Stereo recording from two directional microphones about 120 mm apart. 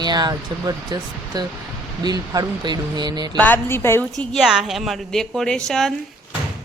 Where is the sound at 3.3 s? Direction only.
15° left (ahead or behind).